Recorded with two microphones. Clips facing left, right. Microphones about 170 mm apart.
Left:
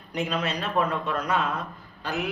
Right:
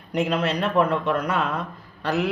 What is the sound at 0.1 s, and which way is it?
Speech, 60° right (ahead or behind).